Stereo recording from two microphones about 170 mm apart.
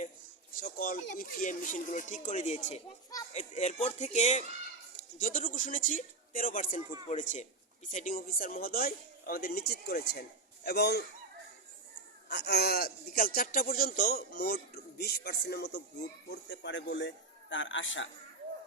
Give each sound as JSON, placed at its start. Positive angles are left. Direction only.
{"t": 0.6, "sound": "speech", "side_deg": 55}
{"t": 12.3, "sound": "speech", "side_deg": 75}